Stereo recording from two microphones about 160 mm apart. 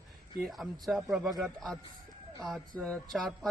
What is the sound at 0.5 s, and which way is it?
Speech, centre (ahead or behind).